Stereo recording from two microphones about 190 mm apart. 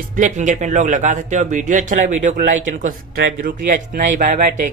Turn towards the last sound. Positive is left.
turn(degrees=-40)  # may be behind; listen again after turning